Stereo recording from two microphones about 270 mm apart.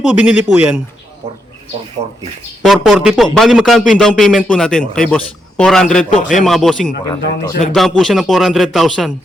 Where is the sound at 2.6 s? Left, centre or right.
Centre.